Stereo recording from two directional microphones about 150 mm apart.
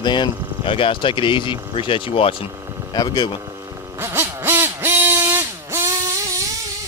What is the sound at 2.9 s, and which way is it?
Speech, 25° left (ahead or behind).